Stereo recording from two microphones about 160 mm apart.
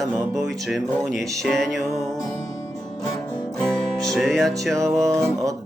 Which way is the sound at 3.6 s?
5° left (ahead or behind).